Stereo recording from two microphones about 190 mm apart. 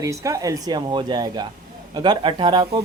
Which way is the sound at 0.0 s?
15° right (ahead or behind).